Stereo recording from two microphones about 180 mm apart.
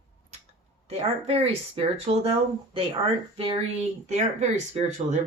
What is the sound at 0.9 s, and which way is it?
Speech, 35° right (ahead or behind).